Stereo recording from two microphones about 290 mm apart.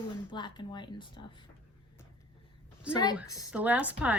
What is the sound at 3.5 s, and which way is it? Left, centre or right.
Speech, centre.